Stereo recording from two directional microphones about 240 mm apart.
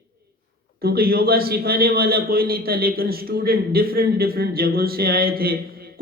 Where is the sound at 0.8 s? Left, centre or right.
Right.